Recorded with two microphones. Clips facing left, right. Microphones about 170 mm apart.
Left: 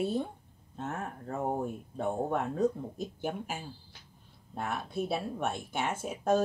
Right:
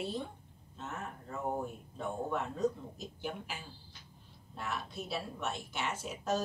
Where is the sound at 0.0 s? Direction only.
50° left (ahead or behind).